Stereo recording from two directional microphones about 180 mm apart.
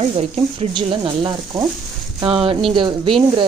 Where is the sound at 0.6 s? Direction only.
25° right (ahead or behind).